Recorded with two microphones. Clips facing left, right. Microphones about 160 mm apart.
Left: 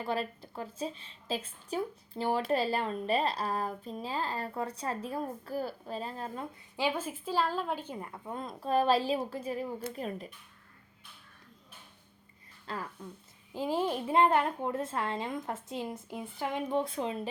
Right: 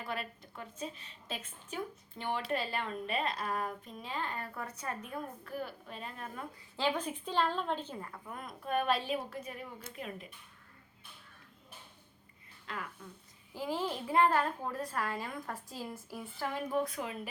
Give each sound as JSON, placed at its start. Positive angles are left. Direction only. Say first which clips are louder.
{"t": 0.0, "sound": "speech", "louder": "left 7 dB", "side_deg": 30}
{"t": 6.7, "sound": "speech", "louder": "left 1 dB", "side_deg": 10}
{"t": 12.6, "sound": "speech", "louder": "left 4 dB", "side_deg": 35}
{"t": 13.5, "sound": "speech", "louder": "left 5 dB", "side_deg": 20}